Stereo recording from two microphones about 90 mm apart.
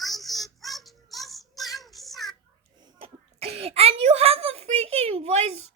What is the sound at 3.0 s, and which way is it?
Speech, 90° right.